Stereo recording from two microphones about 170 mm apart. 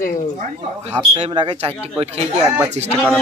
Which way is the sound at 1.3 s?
25° right (ahead or behind).